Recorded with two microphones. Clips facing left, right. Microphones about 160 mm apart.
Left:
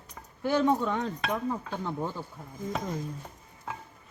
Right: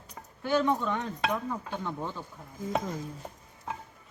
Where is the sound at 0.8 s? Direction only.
15° left (ahead or behind).